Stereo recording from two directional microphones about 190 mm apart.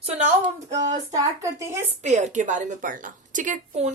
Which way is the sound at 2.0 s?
40° right (ahead or behind).